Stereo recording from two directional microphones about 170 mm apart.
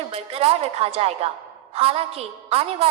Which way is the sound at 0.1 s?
35° right (ahead or behind).